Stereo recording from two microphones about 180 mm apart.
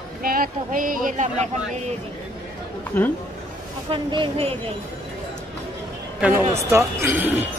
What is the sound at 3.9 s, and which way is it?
Speech, 30° right (ahead or behind).